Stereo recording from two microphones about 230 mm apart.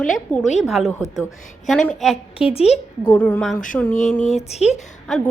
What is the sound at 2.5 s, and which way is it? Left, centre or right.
Speech, left.